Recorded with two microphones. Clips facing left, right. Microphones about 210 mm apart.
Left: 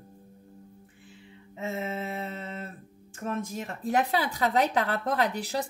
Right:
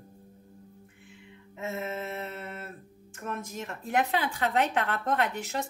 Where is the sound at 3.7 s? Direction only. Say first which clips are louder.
Left 1 dB; 35° left (ahead or behind).